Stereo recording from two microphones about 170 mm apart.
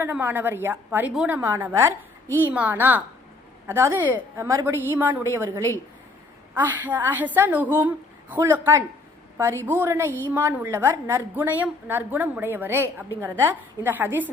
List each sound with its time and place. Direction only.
0.0 s a woman's voice: 10° right (ahead or behind)